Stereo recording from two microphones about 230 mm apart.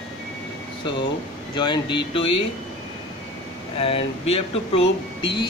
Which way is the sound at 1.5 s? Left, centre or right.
Centre.